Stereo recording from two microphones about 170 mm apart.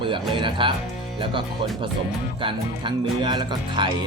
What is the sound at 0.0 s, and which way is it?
Speech, 30° right (ahead or behind).